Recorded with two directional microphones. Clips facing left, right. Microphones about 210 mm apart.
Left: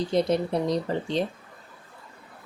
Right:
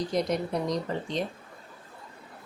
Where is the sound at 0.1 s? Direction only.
30° left (ahead or behind).